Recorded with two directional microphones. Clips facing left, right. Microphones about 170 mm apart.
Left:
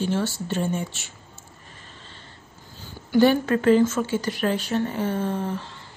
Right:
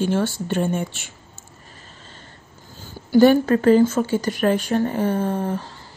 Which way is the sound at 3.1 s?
40° right (ahead or behind).